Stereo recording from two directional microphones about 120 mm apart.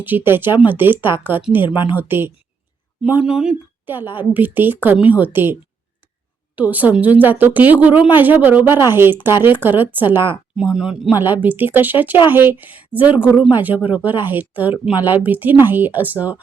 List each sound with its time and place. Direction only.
0.0 s a woman's voice: 15° right (ahead or behind)
6.6 s a woman's voice: 15° right (ahead or behind)
10.6 s a woman's voice: 10° right (ahead or behind)